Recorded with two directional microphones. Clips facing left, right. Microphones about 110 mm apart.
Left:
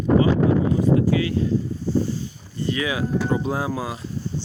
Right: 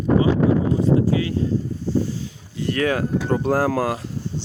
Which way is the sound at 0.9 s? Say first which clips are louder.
Even; 30° right (ahead or behind).